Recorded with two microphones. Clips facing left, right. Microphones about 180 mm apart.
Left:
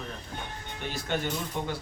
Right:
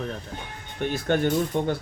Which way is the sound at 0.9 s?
55° right (ahead or behind).